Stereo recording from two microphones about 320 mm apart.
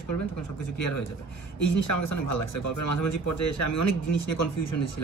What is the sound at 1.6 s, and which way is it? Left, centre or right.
Speech, left.